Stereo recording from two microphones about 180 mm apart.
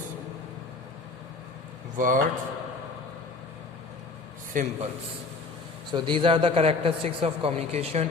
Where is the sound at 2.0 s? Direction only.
45° right (ahead or behind).